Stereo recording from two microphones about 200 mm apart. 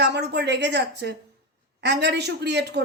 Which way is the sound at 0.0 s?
60° right (ahead or behind).